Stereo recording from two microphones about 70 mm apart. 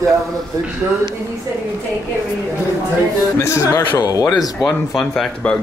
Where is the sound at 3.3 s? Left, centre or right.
Left.